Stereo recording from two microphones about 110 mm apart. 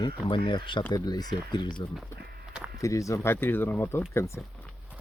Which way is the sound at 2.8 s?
30° left (ahead or behind).